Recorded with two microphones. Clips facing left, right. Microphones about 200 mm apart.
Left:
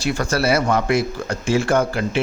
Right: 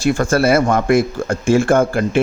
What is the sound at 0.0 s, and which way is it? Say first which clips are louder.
Speech: right 6 dB; 50° right (ahead or behind).